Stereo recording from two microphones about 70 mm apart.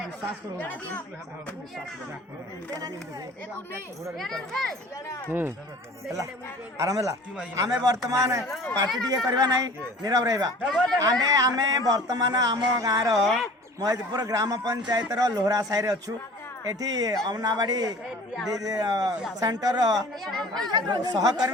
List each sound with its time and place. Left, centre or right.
0.6 s speech: left
4.2 s a child's voice: centre
5.3 s speech: right
6.7 s a man's voice: right
9.0 s speech: right
13.1 s a child's voice: centre
13.7 s speech: right
20.2 s a child's voice: centre
20.6 s speech: right